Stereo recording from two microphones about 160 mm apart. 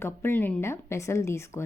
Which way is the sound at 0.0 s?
15° left (ahead or behind).